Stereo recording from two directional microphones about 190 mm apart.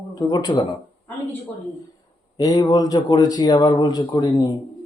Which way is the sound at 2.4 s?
20° left (ahead or behind).